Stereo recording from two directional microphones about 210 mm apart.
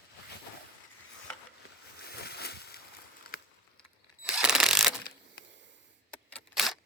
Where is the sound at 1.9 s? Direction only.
50° left (ahead or behind).